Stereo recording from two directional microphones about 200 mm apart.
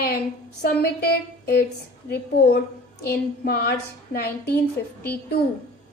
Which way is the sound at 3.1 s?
50° left (ahead or behind).